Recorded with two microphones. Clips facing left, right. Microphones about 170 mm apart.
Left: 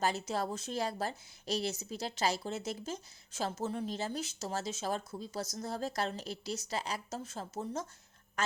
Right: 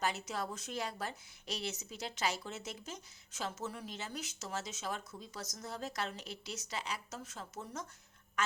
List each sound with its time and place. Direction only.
0.0 s a woman's voice: 35° left (ahead or behind)